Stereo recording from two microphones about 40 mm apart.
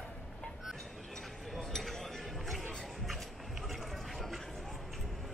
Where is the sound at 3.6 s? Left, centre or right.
Centre.